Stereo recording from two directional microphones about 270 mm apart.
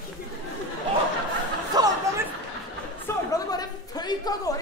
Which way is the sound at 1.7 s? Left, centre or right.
Centre.